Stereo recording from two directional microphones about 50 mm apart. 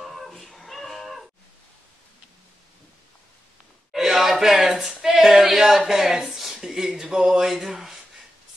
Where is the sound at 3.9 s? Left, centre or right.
Centre.